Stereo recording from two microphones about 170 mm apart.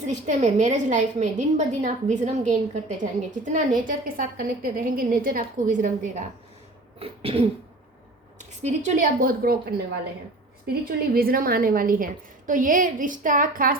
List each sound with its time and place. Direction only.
0.0 s a woman's voice: 45° right (ahead or behind)
7.0 s throat clearing: 35° right (ahead or behind)
8.4 s a woman's voice: 45° right (ahead or behind); by 9.8 s 65° right (ahead or behind)
10.8 s a woman's voice: 60° right (ahead or behind)